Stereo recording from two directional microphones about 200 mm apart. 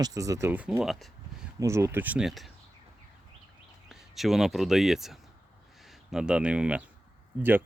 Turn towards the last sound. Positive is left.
turn(degrees=-10)  # may be behind; listen again after turning